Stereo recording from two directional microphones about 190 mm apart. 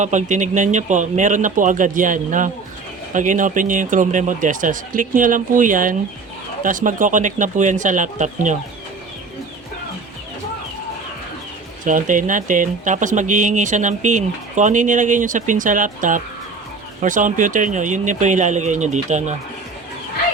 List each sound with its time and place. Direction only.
0.0 s speech: 40° right (ahead or behind)
11.9 s speech: 45° right (ahead or behind)